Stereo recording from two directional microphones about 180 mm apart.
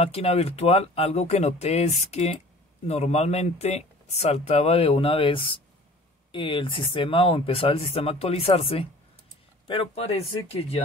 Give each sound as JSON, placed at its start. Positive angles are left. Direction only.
{"t": 0.0, "sound": "speech", "side_deg": 35}